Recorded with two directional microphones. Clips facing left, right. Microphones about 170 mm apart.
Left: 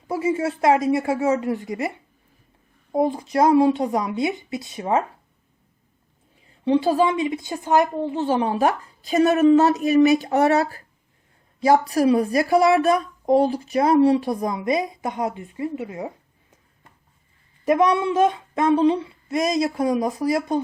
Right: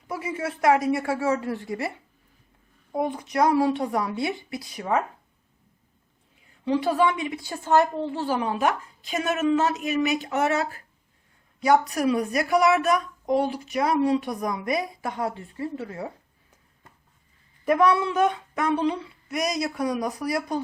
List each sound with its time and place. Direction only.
0.1 s a woman's voice: 25° left (ahead or behind)
2.9 s a woman's voice: 25° left (ahead or behind)
6.7 s a woman's voice: 25° left (ahead or behind)
17.7 s a woman's voice: 20° left (ahead or behind)